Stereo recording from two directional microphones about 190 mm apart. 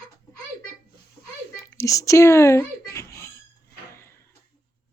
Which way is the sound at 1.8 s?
15° left (ahead or behind).